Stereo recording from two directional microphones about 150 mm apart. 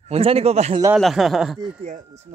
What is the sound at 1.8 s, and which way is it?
Speech, 50° right (ahead or behind).